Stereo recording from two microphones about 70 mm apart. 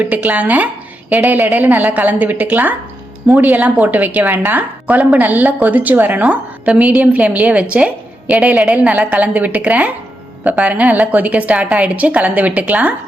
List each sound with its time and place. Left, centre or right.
0.0 s a woman's voice: right